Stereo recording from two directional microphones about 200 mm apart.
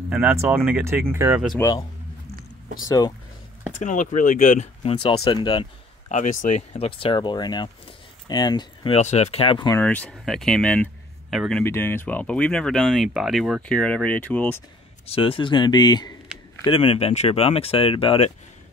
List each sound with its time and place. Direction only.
0.1 s speech: 10° right (ahead or behind)
1.6 s speech: 15° left (ahead or behind)
3.8 s speech: 40° left (ahead or behind); by 5.7 s 20° left (ahead or behind)
6.0 s speech: 40° left (ahead or behind)
6.7 s speech: 25° left (ahead or behind)
9.8 s speech: 5° left (ahead or behind)
15.0 s speech: 25° left (ahead or behind)